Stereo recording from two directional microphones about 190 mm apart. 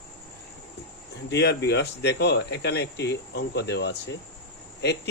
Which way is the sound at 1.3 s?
65° left (ahead or behind).